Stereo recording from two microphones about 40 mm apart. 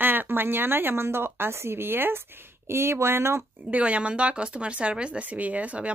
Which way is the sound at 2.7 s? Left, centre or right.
Right.